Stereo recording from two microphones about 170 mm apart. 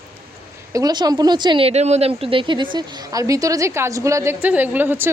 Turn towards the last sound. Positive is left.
turn(degrees=-10)  # may be behind; listen again after turning